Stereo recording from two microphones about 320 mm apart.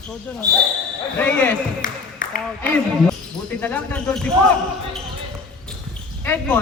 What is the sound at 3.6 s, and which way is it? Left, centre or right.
Speech, centre.